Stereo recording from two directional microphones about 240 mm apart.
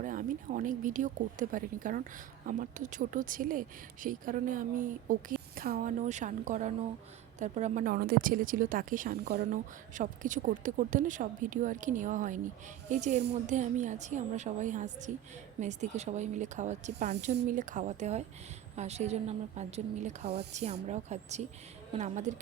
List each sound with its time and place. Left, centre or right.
0.0 s a woman's voice: right
20.2 s speech: right
20.5 s a woman's voice: right